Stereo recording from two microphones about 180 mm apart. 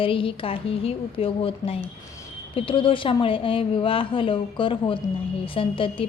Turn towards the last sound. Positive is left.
turn(degrees=30)  # may be behind; listen again after turning